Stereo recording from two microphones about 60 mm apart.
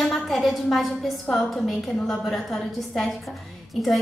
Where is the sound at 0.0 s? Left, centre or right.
Centre.